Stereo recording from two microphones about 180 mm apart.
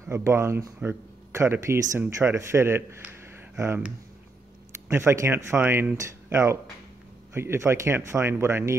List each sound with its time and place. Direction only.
0.0 s speech: 15° right (ahead or behind)